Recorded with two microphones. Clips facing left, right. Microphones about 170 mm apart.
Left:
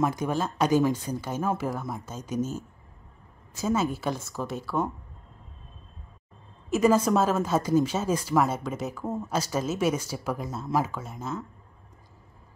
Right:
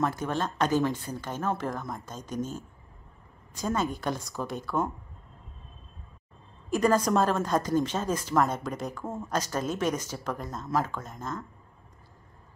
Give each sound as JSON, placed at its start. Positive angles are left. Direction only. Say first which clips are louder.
{"t": 0.0, "sound": "a woman's voice", "louder": "left 2 dB", "side_deg": 10}
{"t": 6.7, "sound": "speech", "louder": "left 2 dB", "side_deg": 5}